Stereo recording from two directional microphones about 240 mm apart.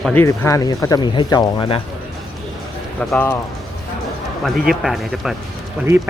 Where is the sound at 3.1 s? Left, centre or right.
Centre.